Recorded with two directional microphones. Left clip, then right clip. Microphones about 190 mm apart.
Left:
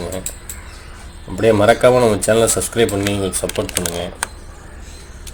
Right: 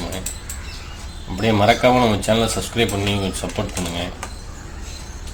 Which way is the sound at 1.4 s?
40° left (ahead or behind).